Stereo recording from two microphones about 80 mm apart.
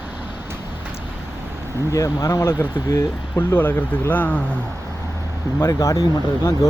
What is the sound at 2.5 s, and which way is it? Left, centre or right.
Speech, left.